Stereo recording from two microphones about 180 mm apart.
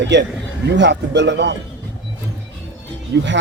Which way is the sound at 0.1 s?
70° right (ahead or behind).